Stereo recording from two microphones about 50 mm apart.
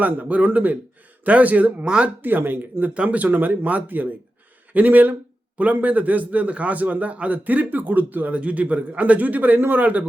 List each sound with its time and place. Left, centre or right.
0.0 s a man's voice: right
1.8 s speech: right
2.2 s a man's voice: right
2.9 s a man's voice: right